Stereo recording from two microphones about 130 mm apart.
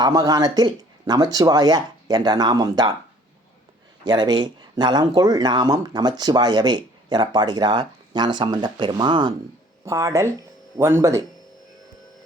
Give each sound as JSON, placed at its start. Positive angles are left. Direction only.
{"t": 0.0, "sound": "speech", "side_deg": -30}
{"t": 4.0, "sound": "speech", "side_deg": -35}